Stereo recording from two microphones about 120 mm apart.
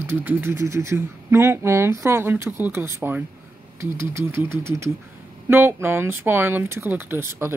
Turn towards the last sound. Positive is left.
turn(degrees=-20)  # may be behind; listen again after turning